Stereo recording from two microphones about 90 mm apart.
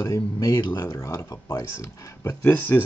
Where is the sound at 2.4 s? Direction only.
20° left (ahead or behind).